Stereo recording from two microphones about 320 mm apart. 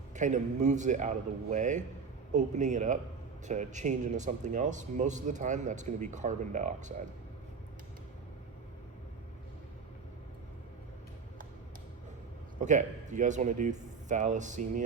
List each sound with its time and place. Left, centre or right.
0.1 s speech: right
12.5 s speech: right